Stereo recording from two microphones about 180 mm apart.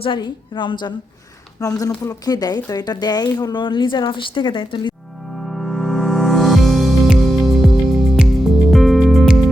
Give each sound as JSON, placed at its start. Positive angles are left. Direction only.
{"t": 0.0, "sound": "speech", "side_deg": 25}
{"t": 5.4, "sound": "music", "side_deg": 0}